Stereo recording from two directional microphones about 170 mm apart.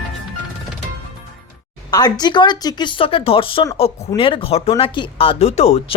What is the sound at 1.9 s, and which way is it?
Speech, 25° left (ahead or behind).